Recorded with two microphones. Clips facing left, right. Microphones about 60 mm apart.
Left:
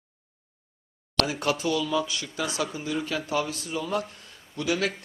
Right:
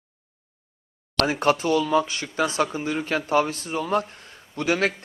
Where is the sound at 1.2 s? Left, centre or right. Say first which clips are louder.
Right 5 dB; right.